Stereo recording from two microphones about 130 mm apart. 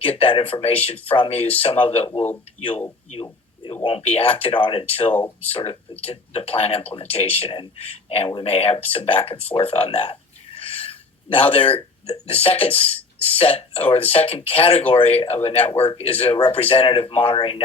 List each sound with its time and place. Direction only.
0.0 s speech: 50° left (ahead or behind)
3.8 s speech: 45° left (ahead or behind)
9.6 s a sound: 50° left (ahead or behind)
12.1 s speech: 45° left (ahead or behind)